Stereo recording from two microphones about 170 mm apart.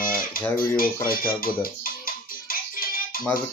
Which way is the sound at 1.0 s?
60° left (ahead or behind).